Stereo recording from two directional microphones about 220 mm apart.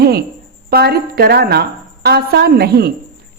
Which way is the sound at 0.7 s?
45° right (ahead or behind).